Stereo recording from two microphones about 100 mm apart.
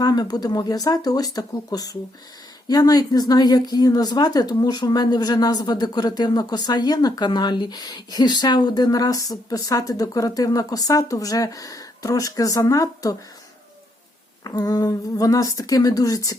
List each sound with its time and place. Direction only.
0.0 s speech: 40° left (ahead or behind)
14.4 s speech: 40° left (ahead or behind)